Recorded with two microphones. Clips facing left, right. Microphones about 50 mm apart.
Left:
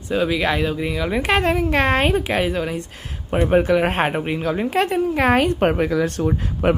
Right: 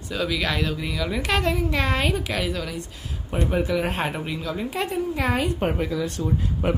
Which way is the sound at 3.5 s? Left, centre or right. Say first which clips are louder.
Left 7 dB; left.